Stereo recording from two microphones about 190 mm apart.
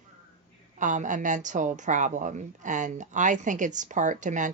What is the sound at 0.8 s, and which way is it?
A woman's voice, 40° right (ahead or behind).